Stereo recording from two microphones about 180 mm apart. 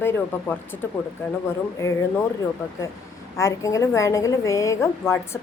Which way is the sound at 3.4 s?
15° left (ahead or behind).